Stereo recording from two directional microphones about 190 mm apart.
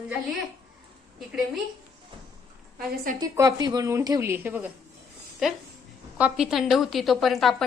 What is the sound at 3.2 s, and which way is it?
A woman's voice, 20° right (ahead or behind).